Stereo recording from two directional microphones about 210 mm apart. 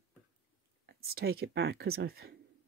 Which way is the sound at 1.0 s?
50° right (ahead or behind).